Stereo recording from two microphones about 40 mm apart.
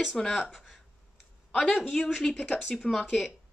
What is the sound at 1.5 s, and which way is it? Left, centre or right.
Speech, left.